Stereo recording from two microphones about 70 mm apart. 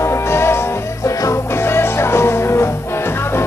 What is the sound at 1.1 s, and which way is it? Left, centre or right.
Music, left.